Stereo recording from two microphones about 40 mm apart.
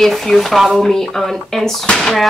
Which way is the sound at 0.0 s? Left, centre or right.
Centre.